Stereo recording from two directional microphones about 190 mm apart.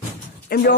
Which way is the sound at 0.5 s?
55° left (ahead or behind).